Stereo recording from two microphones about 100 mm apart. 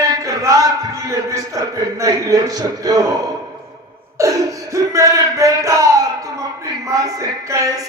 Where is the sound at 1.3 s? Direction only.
35° right (ahead or behind).